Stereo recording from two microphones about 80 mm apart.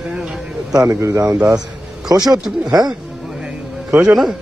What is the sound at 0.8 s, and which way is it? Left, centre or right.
Speech, right.